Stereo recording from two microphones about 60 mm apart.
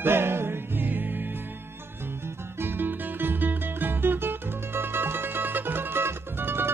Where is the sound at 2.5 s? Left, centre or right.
Right.